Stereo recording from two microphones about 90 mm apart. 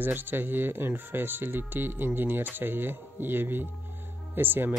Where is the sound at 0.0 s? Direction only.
20° right (ahead or behind).